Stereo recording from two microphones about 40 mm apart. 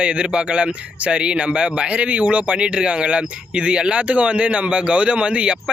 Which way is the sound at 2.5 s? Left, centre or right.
Right.